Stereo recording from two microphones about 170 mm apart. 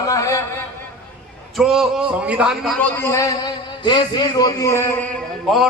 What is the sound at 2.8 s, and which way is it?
A man's voice, 10° left (ahead or behind).